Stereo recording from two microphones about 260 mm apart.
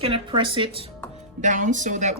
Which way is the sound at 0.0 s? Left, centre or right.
Centre.